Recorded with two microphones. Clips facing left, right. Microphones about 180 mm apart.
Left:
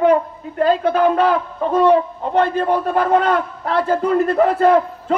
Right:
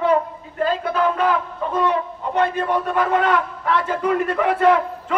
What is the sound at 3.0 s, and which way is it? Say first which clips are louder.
A man's voice: left 2 dB; 45° left (ahead or behind).